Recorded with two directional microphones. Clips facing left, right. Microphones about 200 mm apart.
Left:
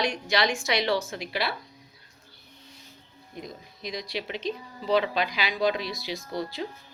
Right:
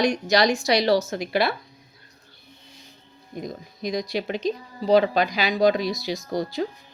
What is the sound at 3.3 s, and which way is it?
Speech, 45° right (ahead or behind).